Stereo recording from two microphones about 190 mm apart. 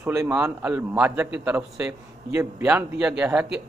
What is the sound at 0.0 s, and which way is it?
A man's voice, 15° right (ahead or behind).